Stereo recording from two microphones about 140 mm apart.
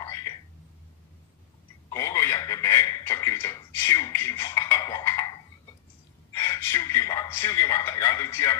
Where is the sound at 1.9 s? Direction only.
25° left (ahead or behind).